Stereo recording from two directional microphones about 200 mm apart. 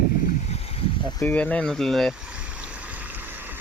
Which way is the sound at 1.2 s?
5° left (ahead or behind).